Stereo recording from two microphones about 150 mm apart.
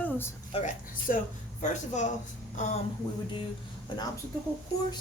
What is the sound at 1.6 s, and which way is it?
Speech, 55° left (ahead or behind).